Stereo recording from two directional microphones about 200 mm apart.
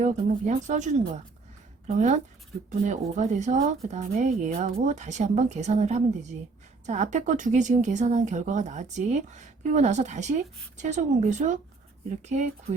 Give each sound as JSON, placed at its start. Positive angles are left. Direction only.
{"t": 0.0, "sound": "speech", "side_deg": -40}
{"t": 2.6, "sound": "speech", "side_deg": -35}